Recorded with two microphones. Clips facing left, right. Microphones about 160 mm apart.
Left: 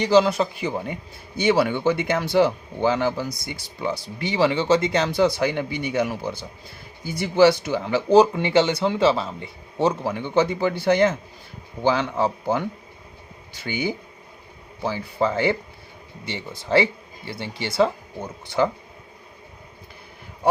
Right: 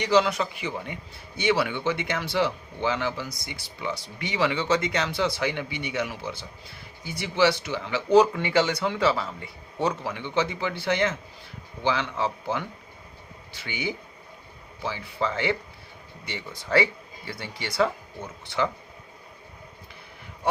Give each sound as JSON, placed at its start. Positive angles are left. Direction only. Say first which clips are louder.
{"t": 0.0, "sound": "speech", "louder": "left 5 dB", "side_deg": 30}
{"t": 10.0, "sound": "a man's voice", "louder": "left 6 dB", "side_deg": 45}
{"t": 16.2, "sound": "speech", "louder": "left 4 dB", "side_deg": 25}
{"t": 18.4, "sound": "speech", "louder": "left 5 dB", "side_deg": 40}